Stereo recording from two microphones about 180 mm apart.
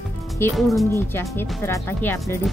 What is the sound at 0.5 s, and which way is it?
Speech, centre (ahead or behind).